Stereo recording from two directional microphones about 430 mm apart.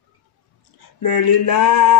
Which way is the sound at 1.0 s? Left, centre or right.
Left.